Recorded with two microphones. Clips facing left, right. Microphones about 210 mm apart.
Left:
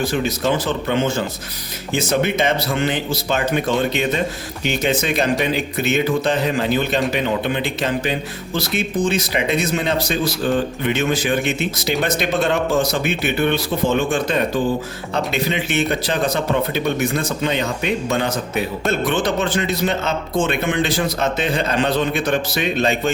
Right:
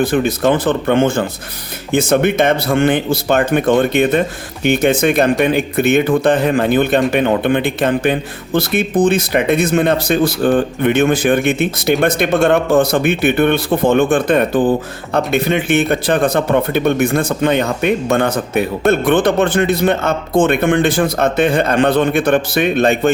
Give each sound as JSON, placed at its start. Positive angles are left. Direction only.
{"t": 0.0, "sound": "speech", "side_deg": -55}